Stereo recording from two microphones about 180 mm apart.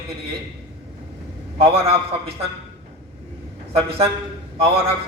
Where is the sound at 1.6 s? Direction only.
30° right (ahead or behind).